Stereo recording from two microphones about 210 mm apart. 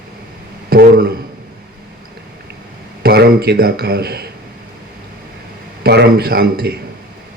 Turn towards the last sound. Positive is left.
turn(degrees=-45)  # may be behind; listen again after turning